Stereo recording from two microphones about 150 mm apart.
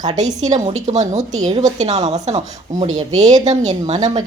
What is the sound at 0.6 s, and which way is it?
A woman's voice, 50° right (ahead or behind).